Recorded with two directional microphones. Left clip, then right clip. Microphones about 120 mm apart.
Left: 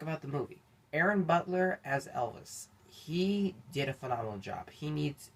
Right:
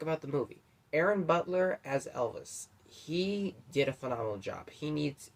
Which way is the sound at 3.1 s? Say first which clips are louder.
Even; 35° right (ahead or behind).